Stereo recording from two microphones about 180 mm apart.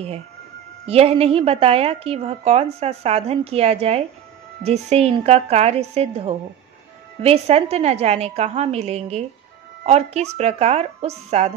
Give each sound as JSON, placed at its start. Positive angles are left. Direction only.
{"t": 0.8, "sound": "a woman's voice", "side_deg": -35}